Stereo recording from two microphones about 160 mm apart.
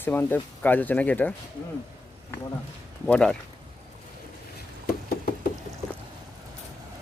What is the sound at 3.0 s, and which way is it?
Speech, 5° left (ahead or behind).